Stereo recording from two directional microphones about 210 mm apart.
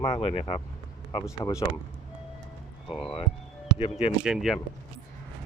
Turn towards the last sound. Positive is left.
turn(degrees=0)  # may be behind; listen again after turning